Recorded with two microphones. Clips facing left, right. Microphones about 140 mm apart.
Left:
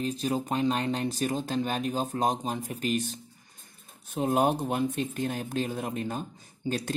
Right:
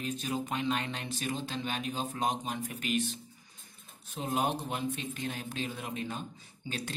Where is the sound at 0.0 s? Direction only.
35° left (ahead or behind).